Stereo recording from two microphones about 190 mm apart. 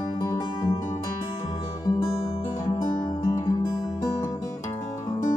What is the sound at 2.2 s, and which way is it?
Music, 25° left (ahead or behind).